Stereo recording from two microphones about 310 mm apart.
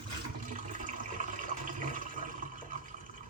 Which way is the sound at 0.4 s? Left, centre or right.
Right.